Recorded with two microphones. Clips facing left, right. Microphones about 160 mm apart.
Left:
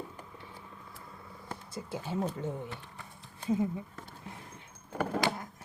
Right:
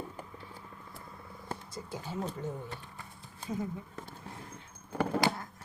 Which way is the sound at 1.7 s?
25° left (ahead or behind).